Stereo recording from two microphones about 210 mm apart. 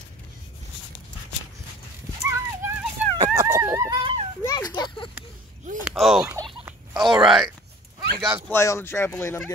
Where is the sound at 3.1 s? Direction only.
15° right (ahead or behind).